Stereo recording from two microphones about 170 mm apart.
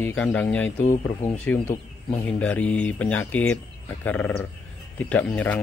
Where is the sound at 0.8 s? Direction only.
45° left (ahead or behind).